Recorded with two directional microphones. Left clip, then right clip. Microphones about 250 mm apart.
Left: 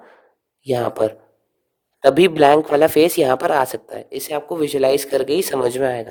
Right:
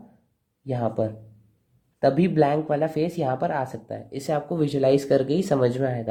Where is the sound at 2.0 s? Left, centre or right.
Left.